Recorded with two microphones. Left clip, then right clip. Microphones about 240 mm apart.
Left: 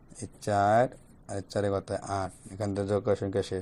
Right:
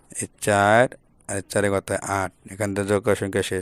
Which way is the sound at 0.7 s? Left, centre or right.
Right.